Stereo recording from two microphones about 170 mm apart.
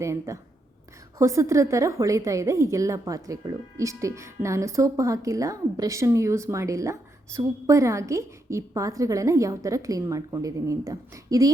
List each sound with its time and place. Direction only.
0.0 s a woman's voice: 15° right (ahead or behind)